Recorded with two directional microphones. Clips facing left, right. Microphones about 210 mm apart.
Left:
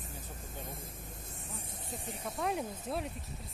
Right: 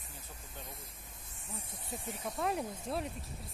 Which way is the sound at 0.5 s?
50° left (ahead or behind).